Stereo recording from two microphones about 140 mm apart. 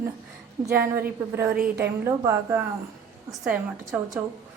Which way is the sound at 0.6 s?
20° right (ahead or behind).